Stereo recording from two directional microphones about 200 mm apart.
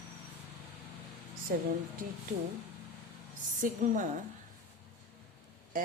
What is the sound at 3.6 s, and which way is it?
Speech, 40° right (ahead or behind).